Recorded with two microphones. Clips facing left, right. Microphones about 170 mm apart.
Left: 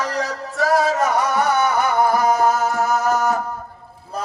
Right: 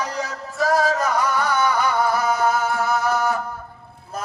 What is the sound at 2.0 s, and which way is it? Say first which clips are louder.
Music: left 4 dB; 45° left (ahead or behind).